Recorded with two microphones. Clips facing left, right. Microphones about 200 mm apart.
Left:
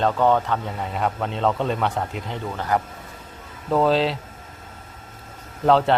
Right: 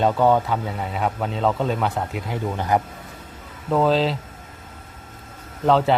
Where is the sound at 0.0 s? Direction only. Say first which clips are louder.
Right 1 dB; 10° right (ahead or behind).